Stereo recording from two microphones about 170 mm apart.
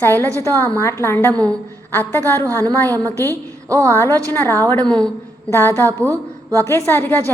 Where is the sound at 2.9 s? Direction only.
20° right (ahead or behind).